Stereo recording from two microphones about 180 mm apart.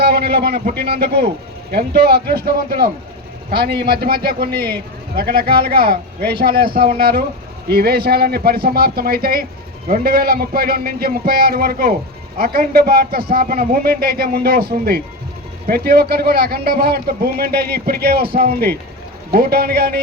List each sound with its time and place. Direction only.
0.0 s a man's voice: 60° right (ahead or behind)